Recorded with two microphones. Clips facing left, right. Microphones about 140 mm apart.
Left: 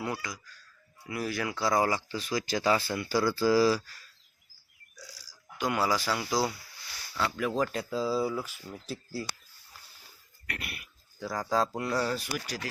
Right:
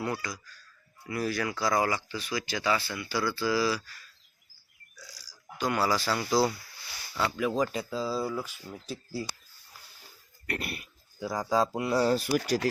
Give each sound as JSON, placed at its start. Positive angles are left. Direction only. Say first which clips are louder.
{"t": 0.0, "sound": "speech", "louder": "right 2 dB", "side_deg": 15}
{"t": 1.8, "sound": "speech", "louder": "left 1 dB", "side_deg": 30}
{"t": 4.9, "sound": "burping", "louder": "left 2 dB", "side_deg": 10}
{"t": 5.2, "sound": "speech", "louder": "right 1 dB", "side_deg": 20}
{"t": 7.1, "sound": "speech", "louder": "right 1 dB", "side_deg": -5}
{"t": 10.4, "sound": "a sound", "louder": "right 6 dB", "side_deg": -35}
{"t": 11.2, "sound": "speech", "louder": "right 2 dB", "side_deg": -10}
{"t": 12.0, "sound": "speech", "louder": "right 6 dB", "side_deg": -30}
{"t": 12.4, "sound": "speech", "louder": "right 10 dB", "side_deg": -45}